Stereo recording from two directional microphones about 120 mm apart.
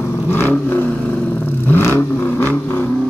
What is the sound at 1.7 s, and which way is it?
Vehicle, 20° left (ahead or behind).